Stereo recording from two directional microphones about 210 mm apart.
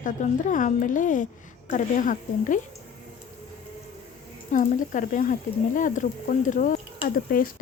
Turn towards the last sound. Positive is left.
turn(degrees=40)  # may be behind; listen again after turning